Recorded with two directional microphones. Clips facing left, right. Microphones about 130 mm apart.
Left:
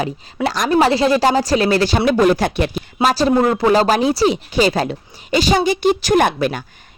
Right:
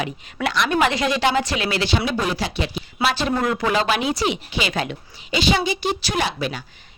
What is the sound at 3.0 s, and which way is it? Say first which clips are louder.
A woman's voice: left 7 dB; 40° left (ahead or behind).